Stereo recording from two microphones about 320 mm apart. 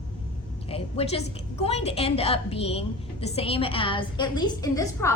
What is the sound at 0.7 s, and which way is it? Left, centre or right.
A woman's voice, centre.